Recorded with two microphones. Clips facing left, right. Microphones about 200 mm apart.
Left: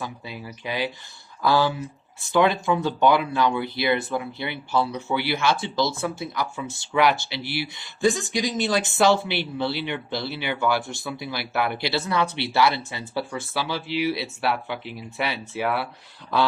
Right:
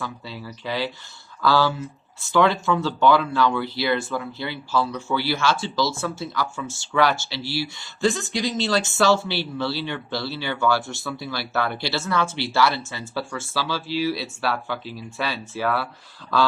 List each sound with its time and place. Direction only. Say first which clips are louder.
0.0 s speech: right 1 dB; 15° left (ahead or behind)